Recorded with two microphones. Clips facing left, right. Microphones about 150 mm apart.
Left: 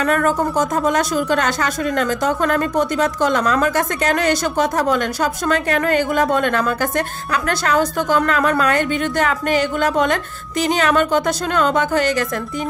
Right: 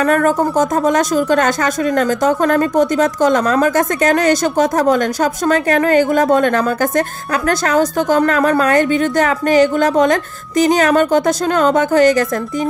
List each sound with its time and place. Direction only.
0.0 s speech: 40° right (ahead or behind)